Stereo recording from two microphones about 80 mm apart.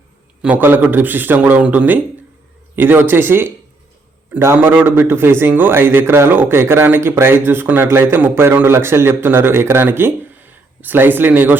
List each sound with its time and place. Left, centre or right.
0.4 s a man's voice: right